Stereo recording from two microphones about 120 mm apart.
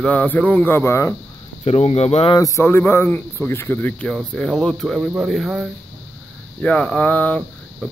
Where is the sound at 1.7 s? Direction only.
60° left (ahead or behind).